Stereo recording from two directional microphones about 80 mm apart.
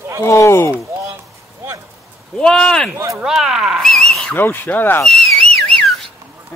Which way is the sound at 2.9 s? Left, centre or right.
Right.